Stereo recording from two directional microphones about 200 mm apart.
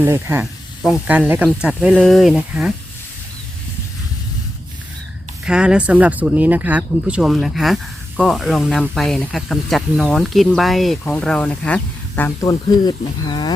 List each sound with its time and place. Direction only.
0.0 s speech: 10° right (ahead or behind)
5.5 s speech: 5° right (ahead or behind); by 13.5 s 20° left (ahead or behind)